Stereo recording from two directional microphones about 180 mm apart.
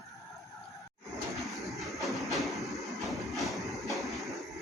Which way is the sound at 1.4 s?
Centre (ahead or behind).